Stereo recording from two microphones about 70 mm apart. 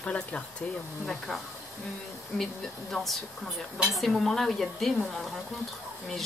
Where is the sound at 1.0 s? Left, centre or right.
Centre.